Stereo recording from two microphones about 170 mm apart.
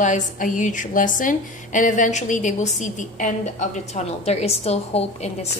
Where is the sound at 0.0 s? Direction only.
45° left (ahead or behind).